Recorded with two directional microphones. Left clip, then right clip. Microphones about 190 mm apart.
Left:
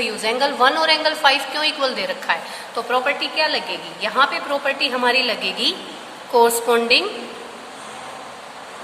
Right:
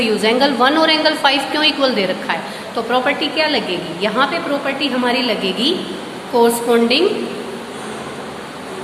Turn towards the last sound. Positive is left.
turn(degrees=35)  # may be behind; listen again after turning